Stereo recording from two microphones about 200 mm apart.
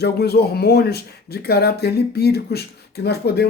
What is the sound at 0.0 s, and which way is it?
Speech, 50° left (ahead or behind).